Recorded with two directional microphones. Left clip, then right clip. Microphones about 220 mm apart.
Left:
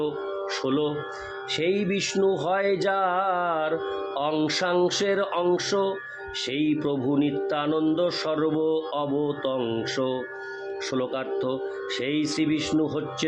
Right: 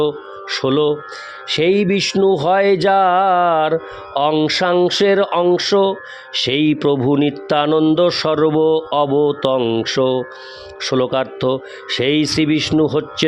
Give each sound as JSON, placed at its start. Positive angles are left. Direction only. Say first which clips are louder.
{"t": 0.5, "sound": "speech", "louder": "right 12 dB", "side_deg": -45}